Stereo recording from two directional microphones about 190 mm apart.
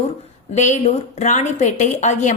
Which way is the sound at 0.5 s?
40° left (ahead or behind).